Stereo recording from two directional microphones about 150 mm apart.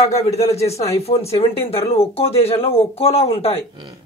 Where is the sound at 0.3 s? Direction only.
45° left (ahead or behind).